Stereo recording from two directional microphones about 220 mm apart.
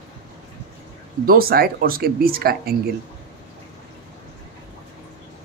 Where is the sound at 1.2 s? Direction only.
45° right (ahead or behind).